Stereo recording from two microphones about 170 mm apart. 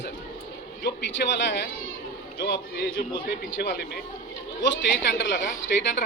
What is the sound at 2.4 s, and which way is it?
A man's voice, 65° left (ahead or behind).